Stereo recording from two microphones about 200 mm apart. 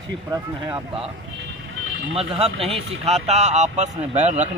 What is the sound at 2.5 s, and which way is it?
Speech, 30° right (ahead or behind).